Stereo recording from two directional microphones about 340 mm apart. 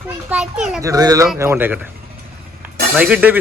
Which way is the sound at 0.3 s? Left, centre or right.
Centre.